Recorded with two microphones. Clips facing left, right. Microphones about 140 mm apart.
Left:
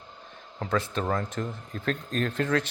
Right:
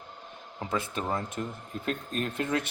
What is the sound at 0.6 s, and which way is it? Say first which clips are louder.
Speech: left 3 dB; 10° right (ahead or behind).